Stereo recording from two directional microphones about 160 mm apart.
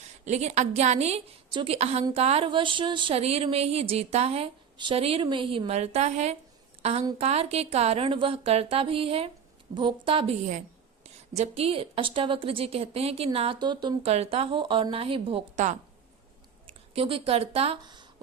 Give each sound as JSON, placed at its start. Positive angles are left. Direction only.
{"t": 0.3, "sound": "a woman's voice", "side_deg": -45}
{"t": 16.9, "sound": "speech", "side_deg": -35}